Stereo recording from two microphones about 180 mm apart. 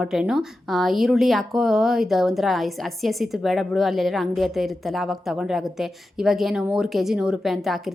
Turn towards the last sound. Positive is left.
turn(degrees=0)  # may be behind; listen again after turning